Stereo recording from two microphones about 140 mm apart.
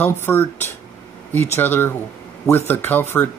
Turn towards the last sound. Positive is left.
turn(degrees=15)  # may be behind; listen again after turning